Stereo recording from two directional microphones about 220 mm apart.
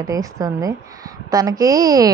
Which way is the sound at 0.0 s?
15° right (ahead or behind).